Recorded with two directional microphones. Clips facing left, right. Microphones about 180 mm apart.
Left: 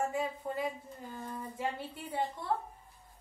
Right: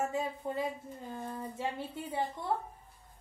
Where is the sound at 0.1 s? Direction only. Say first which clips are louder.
Even; 25° right (ahead or behind).